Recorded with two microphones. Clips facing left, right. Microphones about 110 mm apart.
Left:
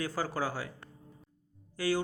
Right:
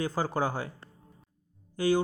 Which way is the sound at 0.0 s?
20° right (ahead or behind).